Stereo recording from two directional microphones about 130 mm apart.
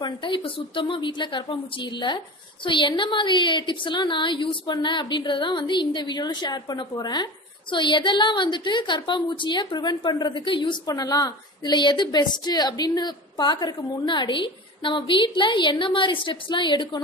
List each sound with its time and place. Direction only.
0.0 s a woman's voice: 40° left (ahead or behind)